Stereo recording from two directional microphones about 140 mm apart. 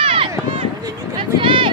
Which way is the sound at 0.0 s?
40° right (ahead or behind).